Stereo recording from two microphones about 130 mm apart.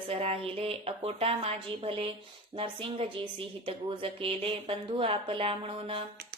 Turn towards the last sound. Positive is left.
turn(degrees=-45)  # may be behind; listen again after turning